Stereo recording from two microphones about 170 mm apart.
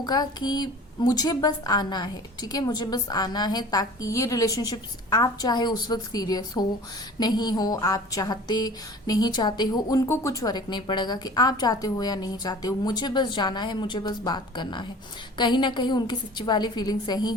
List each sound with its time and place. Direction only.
0.0 s a woman's voice: 25° left (ahead or behind)